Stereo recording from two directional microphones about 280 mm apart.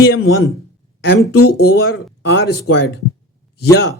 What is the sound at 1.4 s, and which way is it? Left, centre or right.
Speech, left.